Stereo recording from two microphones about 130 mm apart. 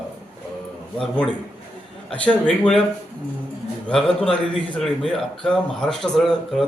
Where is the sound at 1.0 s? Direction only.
10° left (ahead or behind).